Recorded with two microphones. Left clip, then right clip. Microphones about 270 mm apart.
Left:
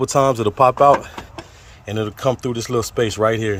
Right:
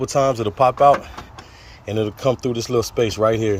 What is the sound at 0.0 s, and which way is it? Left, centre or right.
Speech, centre.